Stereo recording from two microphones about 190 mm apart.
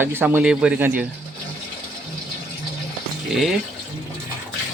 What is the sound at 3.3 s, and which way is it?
Speech, centre (ahead or behind).